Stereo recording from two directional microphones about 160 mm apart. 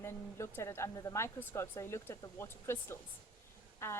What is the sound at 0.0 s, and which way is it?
A woman's voice, 15° left (ahead or behind).